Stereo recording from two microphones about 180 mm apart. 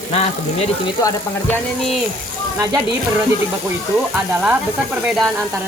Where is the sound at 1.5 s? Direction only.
Centre (ahead or behind).